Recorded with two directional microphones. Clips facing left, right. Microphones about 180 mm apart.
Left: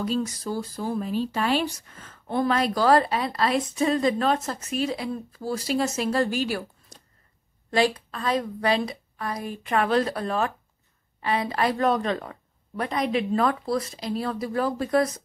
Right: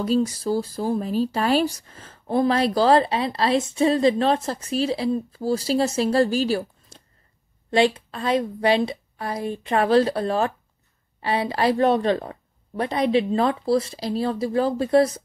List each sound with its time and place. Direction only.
0.0 s a woman's voice: 35° right (ahead or behind)